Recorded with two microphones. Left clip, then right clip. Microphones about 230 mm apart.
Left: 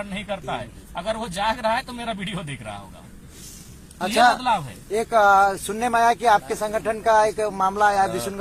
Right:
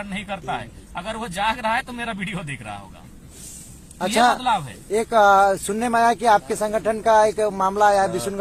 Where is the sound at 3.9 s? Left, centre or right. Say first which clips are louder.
Even; right.